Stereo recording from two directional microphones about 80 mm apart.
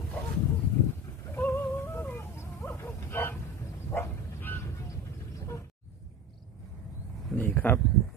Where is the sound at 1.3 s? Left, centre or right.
Left.